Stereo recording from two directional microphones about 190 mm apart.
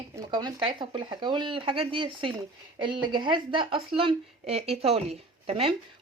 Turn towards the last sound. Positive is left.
turn(degrees=-30)  # may be behind; listen again after turning